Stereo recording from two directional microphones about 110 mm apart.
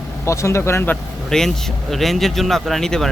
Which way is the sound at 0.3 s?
25° left (ahead or behind).